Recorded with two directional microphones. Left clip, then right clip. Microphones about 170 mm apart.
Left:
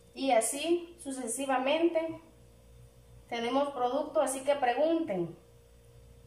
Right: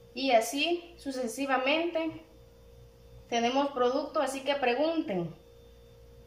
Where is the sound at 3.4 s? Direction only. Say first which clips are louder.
Right 2 dB; 25° left (ahead or behind).